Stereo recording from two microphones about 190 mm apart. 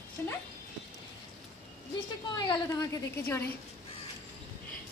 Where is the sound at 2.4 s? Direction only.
20° left (ahead or behind).